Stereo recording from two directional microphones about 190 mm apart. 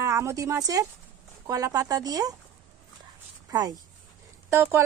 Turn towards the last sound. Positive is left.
turn(degrees=-15)  # may be behind; listen again after turning